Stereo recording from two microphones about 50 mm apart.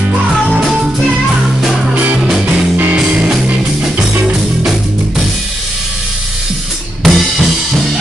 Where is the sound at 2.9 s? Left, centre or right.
Right.